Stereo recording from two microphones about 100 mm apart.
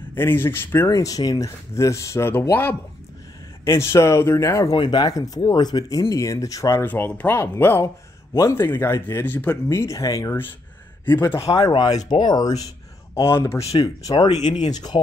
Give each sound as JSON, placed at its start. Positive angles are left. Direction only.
{"t": 0.1, "sound": "speech", "side_deg": 25}
{"t": 0.8, "sound": "speech", "side_deg": 35}
{"t": 4.6, "sound": "speech", "side_deg": 50}
{"t": 6.9, "sound": "speech", "side_deg": 15}
{"t": 11.1, "sound": "speech", "side_deg": 25}
{"t": 13.1, "sound": "speech", "side_deg": 25}
{"t": 14.2, "sound": "speech", "side_deg": 45}